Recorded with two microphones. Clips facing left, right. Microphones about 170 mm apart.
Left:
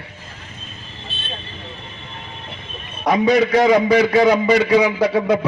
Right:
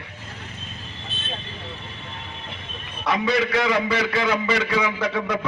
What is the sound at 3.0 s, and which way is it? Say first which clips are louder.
A man's voice: left 7 dB; 40° left (ahead or behind).